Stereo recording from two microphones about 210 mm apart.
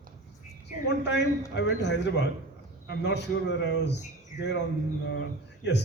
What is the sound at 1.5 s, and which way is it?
A man's voice, 55° left (ahead or behind).